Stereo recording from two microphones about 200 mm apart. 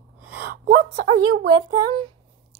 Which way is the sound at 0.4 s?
50° right (ahead or behind).